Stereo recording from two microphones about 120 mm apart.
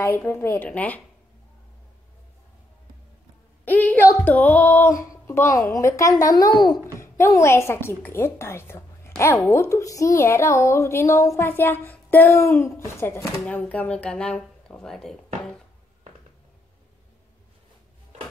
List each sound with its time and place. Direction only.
0.0 s speech: 20° left (ahead or behind)
3.6 s a sound: 15° left (ahead or behind)
4.2 s speech: 15° left (ahead or behind)
4.9 s a woman's voice: 30° left (ahead or behind)
7.0 s a woman's voice: 25° left (ahead or behind)
13.4 s speech: 10° left (ahead or behind)